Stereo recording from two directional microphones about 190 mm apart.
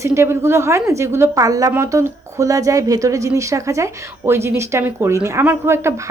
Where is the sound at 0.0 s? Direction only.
15° right (ahead or behind).